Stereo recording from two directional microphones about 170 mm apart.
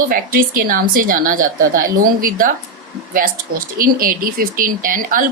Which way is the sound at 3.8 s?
55° right (ahead or behind).